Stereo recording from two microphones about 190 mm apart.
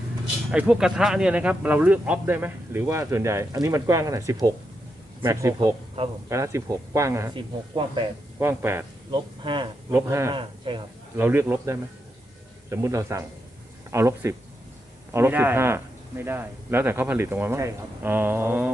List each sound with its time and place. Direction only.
0.5 s speech: 5° right (ahead or behind)
8.4 s speech: 15° right (ahead or behind)
9.1 s speech: 25° right (ahead or behind)
10.3 s speech: 25° right (ahead or behind)
11.2 s speech: 10° right (ahead or behind)